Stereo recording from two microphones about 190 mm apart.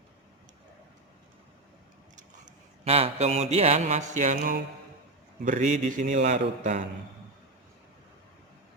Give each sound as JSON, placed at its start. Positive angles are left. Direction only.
{"t": 2.1, "sound": "a man's voice", "side_deg": -35}